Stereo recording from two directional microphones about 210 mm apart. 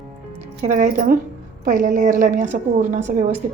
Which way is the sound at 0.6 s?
40° right (ahead or behind).